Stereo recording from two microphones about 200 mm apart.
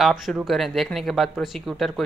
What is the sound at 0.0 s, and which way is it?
Speech, centre (ahead or behind).